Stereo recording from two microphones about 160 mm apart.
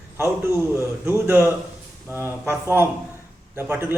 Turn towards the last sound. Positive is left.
turn(degrees=-15)  # may be behind; listen again after turning